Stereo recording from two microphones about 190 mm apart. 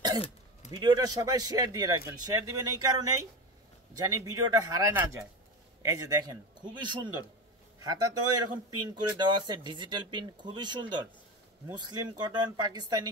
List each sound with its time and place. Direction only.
0.7 s speech: 20° right (ahead or behind)